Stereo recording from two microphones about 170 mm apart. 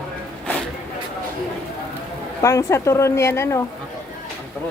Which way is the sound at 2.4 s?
20° left (ahead or behind).